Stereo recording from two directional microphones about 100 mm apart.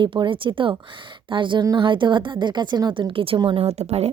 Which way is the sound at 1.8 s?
55° right (ahead or behind).